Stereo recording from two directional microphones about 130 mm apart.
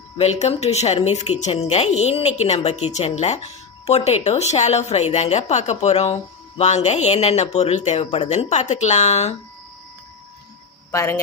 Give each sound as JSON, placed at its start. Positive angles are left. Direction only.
{"t": 0.2, "sound": "speech", "side_deg": 55}
{"t": 10.9, "sound": "speech", "side_deg": 20}